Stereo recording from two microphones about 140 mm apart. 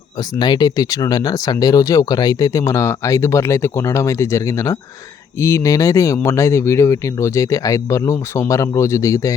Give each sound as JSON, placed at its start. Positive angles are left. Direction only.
{"t": 0.2, "sound": "speech", "side_deg": 30}